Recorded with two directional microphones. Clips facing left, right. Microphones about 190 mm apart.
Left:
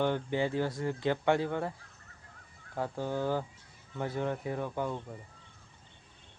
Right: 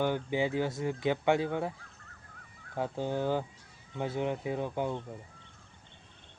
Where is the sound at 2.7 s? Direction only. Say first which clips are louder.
Right 1 dB; 20° right (ahead or behind).